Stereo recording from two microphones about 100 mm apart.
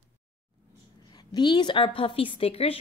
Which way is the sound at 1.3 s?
50° left (ahead or behind).